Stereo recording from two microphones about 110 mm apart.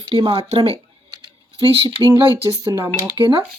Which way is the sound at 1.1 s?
50° right (ahead or behind).